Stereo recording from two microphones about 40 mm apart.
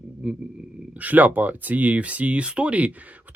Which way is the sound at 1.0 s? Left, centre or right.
Right.